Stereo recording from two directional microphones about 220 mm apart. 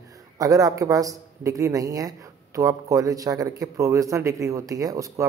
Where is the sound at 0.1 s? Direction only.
15° right (ahead or behind).